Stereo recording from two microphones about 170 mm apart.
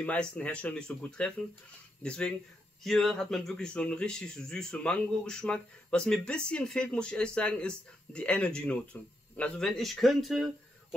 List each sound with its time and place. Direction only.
0.0 s speech: 5° left (ahead or behind)